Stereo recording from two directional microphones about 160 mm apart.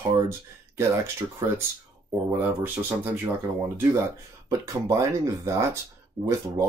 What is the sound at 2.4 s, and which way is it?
Speech, 10° right (ahead or behind).